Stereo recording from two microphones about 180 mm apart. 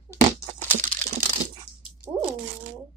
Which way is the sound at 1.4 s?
25° left (ahead or behind).